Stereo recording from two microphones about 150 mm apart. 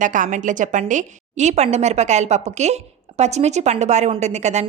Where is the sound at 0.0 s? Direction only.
60° right (ahead or behind).